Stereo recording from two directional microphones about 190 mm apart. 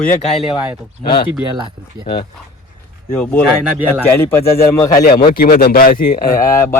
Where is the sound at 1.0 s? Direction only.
25° left (ahead or behind).